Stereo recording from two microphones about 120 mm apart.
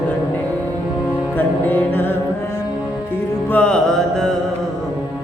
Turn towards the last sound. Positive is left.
turn(degrees=5)  # may be behind; listen again after turning